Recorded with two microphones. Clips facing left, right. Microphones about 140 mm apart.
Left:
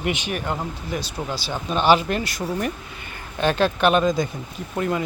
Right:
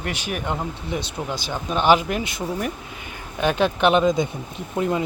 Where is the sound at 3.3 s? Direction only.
15° right (ahead or behind).